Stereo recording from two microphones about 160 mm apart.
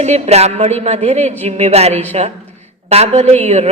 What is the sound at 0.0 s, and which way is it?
A woman's voice, 40° right (ahead or behind).